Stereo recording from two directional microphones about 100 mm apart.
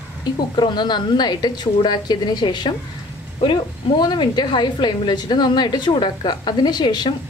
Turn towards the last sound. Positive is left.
turn(degrees=45)  # may be behind; listen again after turning